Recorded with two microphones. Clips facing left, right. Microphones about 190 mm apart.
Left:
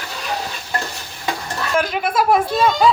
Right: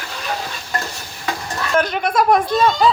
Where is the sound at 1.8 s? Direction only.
5° left (ahead or behind).